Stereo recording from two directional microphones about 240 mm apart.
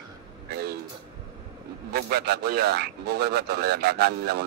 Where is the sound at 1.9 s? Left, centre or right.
Right.